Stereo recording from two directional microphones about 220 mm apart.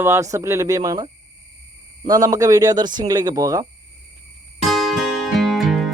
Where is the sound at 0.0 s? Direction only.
10° right (ahead or behind).